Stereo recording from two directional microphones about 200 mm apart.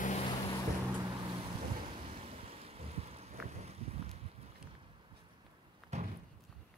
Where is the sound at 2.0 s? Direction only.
30° right (ahead or behind).